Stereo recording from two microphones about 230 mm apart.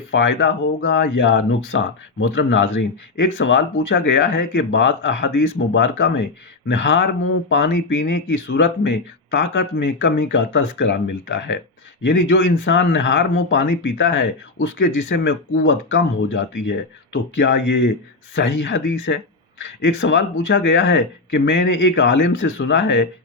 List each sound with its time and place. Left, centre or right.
0.1 s speech: left